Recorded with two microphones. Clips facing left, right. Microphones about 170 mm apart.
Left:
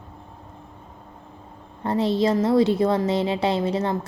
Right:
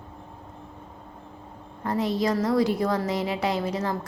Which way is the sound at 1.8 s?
30° left (ahead or behind).